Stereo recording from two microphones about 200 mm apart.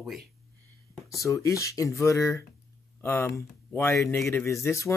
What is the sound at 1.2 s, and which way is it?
Speech, 15° left (ahead or behind).